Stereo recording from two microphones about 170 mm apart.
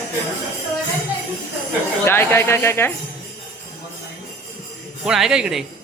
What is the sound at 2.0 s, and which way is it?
Speech, 15° left (ahead or behind).